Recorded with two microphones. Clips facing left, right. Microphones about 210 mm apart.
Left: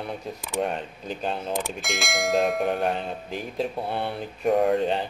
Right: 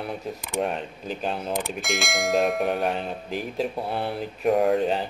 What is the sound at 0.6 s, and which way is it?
Bell, centre (ahead or behind).